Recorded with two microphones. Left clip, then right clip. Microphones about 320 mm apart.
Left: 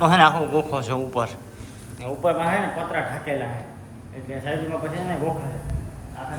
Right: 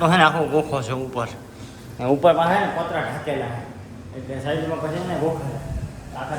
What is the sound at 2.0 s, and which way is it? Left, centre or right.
Speech, right.